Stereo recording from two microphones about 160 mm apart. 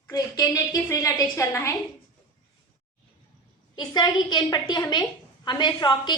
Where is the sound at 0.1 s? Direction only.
25° left (ahead or behind).